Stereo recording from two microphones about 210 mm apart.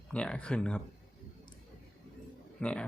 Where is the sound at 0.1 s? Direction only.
5° left (ahead or behind).